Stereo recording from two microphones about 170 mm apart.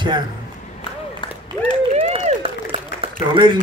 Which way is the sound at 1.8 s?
35° right (ahead or behind).